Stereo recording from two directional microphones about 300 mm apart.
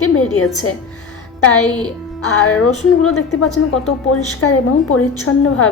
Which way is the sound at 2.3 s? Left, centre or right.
Left.